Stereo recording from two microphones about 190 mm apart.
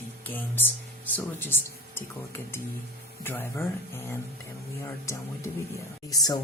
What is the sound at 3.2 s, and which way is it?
Speech, 10° left (ahead or behind).